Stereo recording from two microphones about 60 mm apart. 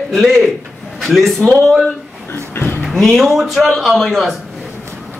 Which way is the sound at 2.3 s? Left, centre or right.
Left.